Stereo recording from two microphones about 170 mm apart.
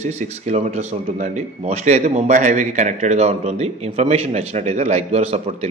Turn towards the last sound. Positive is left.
turn(degrees=-40)  # may be behind; listen again after turning